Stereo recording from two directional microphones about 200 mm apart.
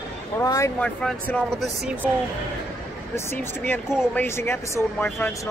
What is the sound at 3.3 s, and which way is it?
Speech, 10° left (ahead or behind).